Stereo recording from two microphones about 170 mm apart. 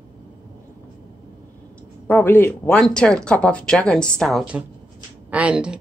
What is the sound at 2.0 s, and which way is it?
A woman's voice, 10° left (ahead or behind).